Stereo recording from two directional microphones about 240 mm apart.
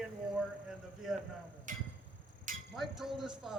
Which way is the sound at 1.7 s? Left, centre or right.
Right.